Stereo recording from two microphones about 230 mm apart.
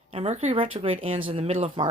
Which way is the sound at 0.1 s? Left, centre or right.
Right.